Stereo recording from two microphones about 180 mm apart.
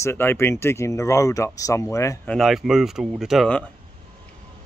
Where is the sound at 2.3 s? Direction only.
Centre (ahead or behind).